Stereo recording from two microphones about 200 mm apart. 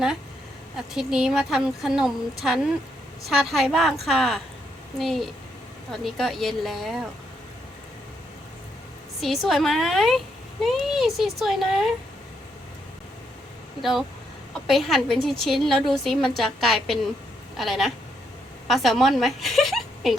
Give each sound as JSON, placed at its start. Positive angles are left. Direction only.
{"t": 0.9, "sound": "speech", "side_deg": -5}
{"t": 9.2, "sound": "speech", "side_deg": 0}
{"t": 14.7, "sound": "speech", "side_deg": 0}